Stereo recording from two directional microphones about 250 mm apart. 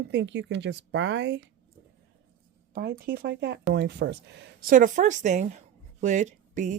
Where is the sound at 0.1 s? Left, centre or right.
Right.